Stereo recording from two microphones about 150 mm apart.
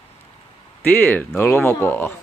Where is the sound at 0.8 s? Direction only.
10° left (ahead or behind).